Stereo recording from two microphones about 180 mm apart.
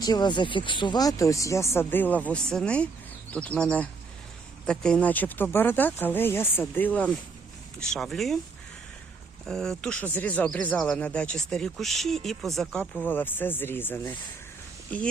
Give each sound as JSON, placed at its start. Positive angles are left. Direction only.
{"t": 0.0, "sound": "speech", "side_deg": 25}
{"t": 9.5, "sound": "speech", "side_deg": 5}